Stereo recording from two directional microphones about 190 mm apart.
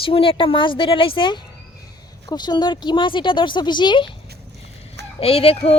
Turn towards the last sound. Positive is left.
turn(degrees=30)  # may be behind; listen again after turning